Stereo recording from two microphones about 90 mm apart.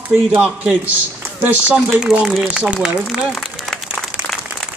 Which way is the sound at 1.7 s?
5° right (ahead or behind).